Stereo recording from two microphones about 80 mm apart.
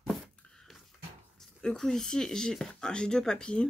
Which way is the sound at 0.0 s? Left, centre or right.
Centre.